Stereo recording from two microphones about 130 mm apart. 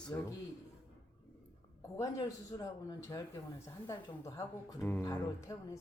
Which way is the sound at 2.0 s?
25° left (ahead or behind).